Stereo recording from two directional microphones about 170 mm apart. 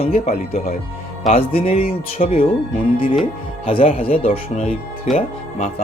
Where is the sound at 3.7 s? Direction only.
35° left (ahead or behind).